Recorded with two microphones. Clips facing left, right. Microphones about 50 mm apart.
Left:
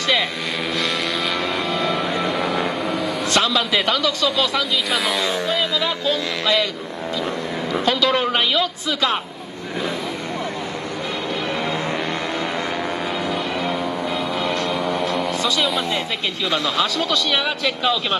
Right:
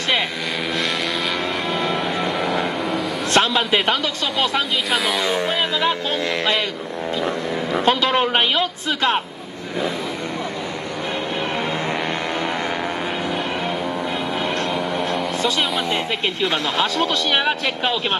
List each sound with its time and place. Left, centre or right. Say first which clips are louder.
1.4 s music: even; centre
3.3 s a man's voice: right 2 dB; right
4.9 s speech: right 2 dB; centre
5.3 s a man's voice: right 1 dB; right
7.8 s a man's voice: right 1 dB; right
14.7 s vehicle: left 1 dB; centre
16.4 s a man's voice: left 1 dB; right